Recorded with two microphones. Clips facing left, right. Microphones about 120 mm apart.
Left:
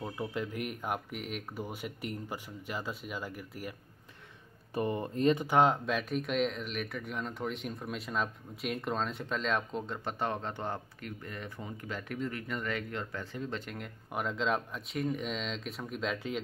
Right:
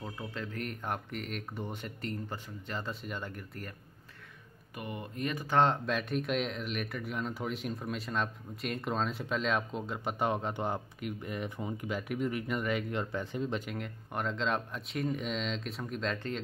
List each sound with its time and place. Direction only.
0.0 s speech: 15° left (ahead or behind)
4.7 s speech: 30° left (ahead or behind)
5.5 s speech: 10° left (ahead or behind); by 13.7 s 15° right (ahead or behind)
13.7 s speech: centre (ahead or behind)